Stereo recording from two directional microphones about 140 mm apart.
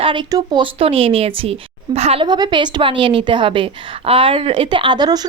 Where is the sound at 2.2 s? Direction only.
30° right (ahead or behind).